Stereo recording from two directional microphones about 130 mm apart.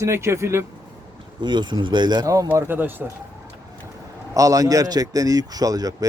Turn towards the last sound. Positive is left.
turn(degrees=-30)  # may be behind; listen again after turning